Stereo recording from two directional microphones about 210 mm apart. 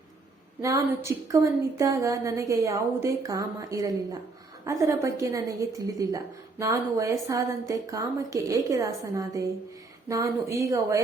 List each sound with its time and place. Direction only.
0.6 s a woman's voice: 15° right (ahead or behind)